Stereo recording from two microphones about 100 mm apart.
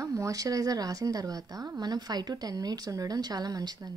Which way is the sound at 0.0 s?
35° right (ahead or behind).